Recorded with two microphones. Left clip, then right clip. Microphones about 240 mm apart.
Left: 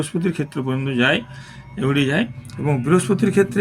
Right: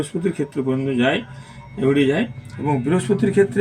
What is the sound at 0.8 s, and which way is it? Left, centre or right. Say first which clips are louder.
Speech: left 3 dB; left.